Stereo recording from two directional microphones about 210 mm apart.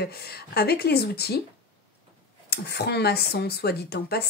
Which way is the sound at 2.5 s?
50° left (ahead or behind).